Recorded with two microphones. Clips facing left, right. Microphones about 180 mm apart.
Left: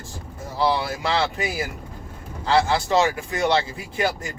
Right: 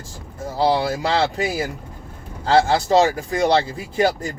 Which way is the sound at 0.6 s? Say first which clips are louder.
Right 4 dB; 35° right (ahead or behind).